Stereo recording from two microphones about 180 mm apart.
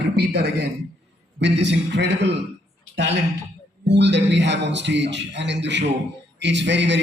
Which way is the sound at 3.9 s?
75° right (ahead or behind).